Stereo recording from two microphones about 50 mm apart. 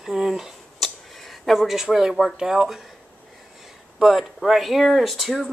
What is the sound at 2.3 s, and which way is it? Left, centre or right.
Speech, centre.